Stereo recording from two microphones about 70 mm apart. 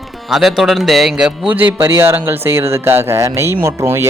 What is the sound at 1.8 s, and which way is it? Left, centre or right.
Speech, right.